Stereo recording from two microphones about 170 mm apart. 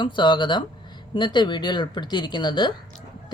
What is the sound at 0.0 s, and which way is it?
A woman's voice, 25° left (ahead or behind).